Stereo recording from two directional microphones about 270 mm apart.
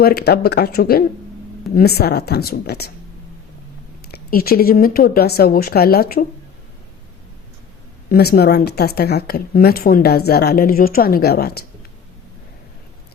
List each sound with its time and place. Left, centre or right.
0.0 s speech: left
4.1 s speech: left
8.1 s speech: left